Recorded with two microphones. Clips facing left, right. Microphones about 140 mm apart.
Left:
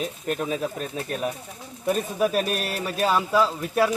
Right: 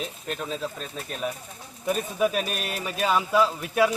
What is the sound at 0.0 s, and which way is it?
Speech, 50° left (ahead or behind).